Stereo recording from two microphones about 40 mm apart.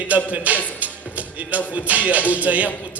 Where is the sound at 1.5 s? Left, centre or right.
Right.